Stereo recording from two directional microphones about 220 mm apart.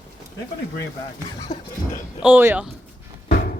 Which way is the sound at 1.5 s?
30° left (ahead or behind).